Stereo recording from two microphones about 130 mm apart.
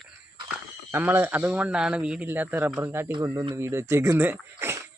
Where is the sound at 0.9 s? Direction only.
15° right (ahead or behind).